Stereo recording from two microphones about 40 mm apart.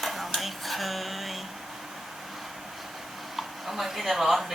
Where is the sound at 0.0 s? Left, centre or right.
Centre.